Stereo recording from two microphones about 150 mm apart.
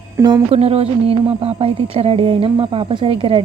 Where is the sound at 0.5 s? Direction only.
40° right (ahead or behind).